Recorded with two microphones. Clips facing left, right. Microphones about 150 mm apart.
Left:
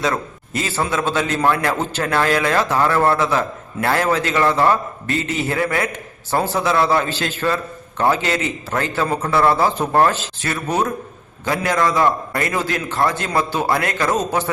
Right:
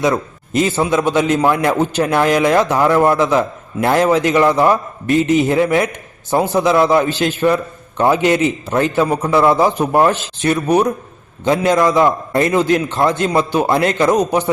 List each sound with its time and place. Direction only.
0.0 s a man's voice: 15° right (ahead or behind)